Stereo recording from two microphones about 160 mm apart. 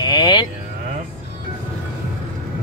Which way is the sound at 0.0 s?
25° left (ahead or behind).